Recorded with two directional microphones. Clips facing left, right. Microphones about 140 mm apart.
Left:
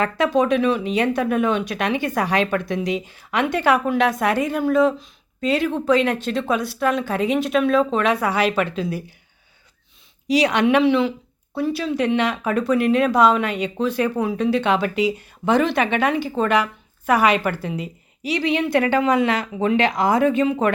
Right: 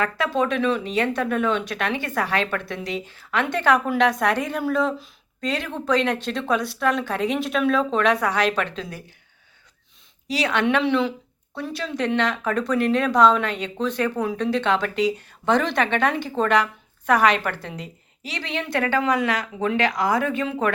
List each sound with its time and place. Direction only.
0.0 s speech: 20° left (ahead or behind)
10.2 s speech: 15° left (ahead or behind)
10.8 s a woman's voice: 5° left (ahead or behind); by 20.7 s 20° left (ahead or behind)